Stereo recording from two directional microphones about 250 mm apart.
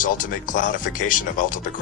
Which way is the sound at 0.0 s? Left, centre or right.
Left.